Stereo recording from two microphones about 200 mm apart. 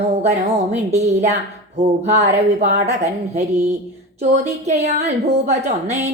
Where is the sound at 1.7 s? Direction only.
35° right (ahead or behind).